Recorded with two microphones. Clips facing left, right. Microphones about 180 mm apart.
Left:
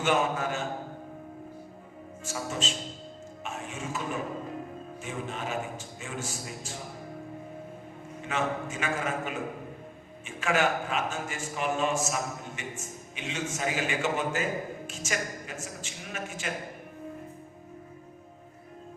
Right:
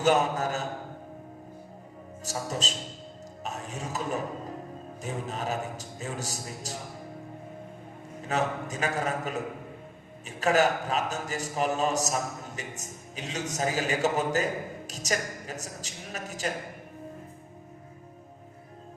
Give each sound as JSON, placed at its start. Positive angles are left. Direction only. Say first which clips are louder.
{"t": 0.0, "sound": "a man's voice", "louder": "right 3 dB", "side_deg": -40}
{"t": 2.2, "sound": "a man's voice", "louder": "right 1 dB", "side_deg": -40}
{"t": 3.4, "sound": "music", "louder": "right 1 dB", "side_deg": -40}
{"t": 5.0, "sound": "a man's voice", "louder": "right 3 dB", "side_deg": -40}
{"t": 8.2, "sound": "a man's voice", "louder": "right 2 dB", "side_deg": -40}